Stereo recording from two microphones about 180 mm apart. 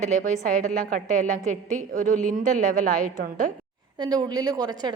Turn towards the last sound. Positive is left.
turn(degrees=-20)  # may be behind; listen again after turning